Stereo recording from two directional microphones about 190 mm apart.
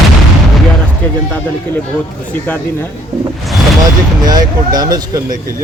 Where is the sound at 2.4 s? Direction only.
10° left (ahead or behind).